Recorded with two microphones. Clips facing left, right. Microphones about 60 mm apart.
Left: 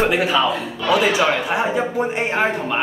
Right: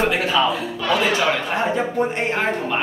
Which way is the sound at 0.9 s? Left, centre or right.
Centre.